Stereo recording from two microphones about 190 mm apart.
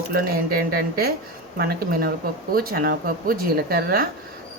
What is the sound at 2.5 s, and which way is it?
Speech, 50° right (ahead or behind).